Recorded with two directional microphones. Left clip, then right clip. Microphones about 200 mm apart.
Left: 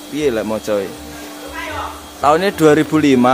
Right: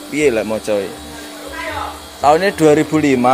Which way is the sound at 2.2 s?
15° left (ahead or behind).